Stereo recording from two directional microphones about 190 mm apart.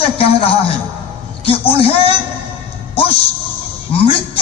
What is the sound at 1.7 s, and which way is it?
Speech, 30° left (ahead or behind).